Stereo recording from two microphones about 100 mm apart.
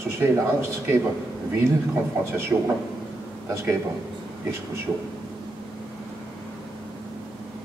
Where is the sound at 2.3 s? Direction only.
25° right (ahead or behind).